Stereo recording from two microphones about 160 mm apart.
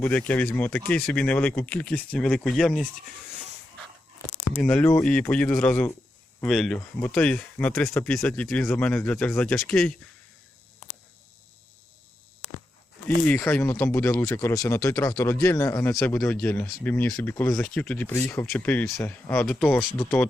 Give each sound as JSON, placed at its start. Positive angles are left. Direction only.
{"t": 0.0, "sound": "speech", "side_deg": 10}
{"t": 4.5, "sound": "speech", "side_deg": 5}
{"t": 13.2, "sound": "speech", "side_deg": 10}
{"t": 20.0, "sound": "speech", "side_deg": 15}